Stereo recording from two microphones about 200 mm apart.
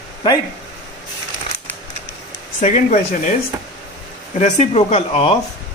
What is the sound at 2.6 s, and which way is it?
Speech, 35° left (ahead or behind).